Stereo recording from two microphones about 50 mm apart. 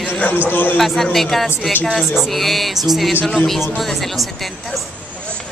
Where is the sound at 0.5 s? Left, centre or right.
Left.